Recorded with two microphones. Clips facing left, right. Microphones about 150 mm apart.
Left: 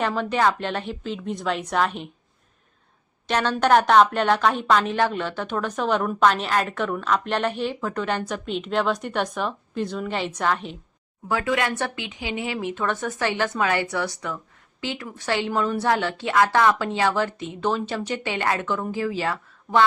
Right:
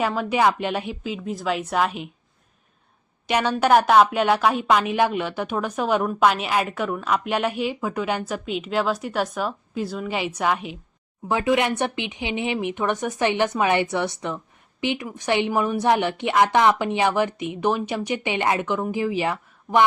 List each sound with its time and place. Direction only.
0.0 s a woman's voice: 10° right (ahead or behind)
3.2 s a woman's voice: 10° right (ahead or behind)